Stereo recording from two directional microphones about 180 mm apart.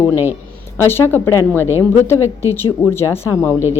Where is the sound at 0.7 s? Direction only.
15° left (ahead or behind).